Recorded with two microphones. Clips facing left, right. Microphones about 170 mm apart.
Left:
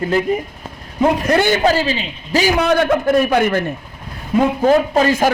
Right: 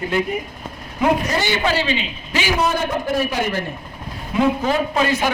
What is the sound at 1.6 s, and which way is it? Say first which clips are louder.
Speech: left 5 dB; 40° left (ahead or behind).